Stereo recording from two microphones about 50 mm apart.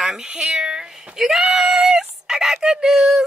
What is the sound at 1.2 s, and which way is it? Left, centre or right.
Speech, centre.